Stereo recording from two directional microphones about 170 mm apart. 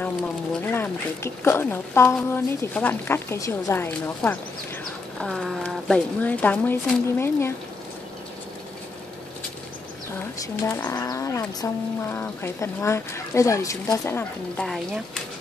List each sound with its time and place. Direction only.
0.6 s speech: 10° left (ahead or behind)
10.1 s speech: 15° left (ahead or behind)